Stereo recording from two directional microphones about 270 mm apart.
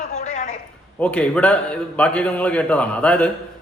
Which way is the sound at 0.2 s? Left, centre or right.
Left.